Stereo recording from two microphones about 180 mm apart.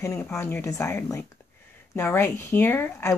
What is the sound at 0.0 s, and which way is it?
A woman's voice, 15° left (ahead or behind).